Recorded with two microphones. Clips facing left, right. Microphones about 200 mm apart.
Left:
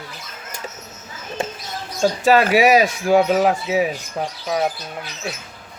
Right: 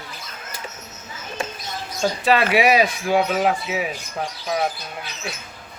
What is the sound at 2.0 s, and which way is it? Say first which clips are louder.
Speech: left 4 dB; 40° left (ahead or behind).